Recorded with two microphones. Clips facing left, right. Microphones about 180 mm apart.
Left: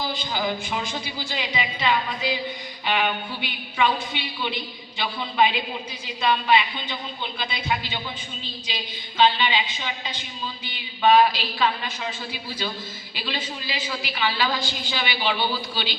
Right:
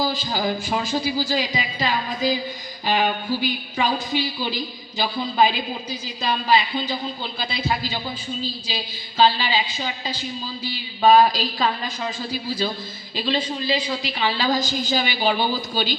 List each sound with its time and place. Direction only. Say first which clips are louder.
0.0 s a woman's voice: right 4 dB; 40° right (ahead or behind)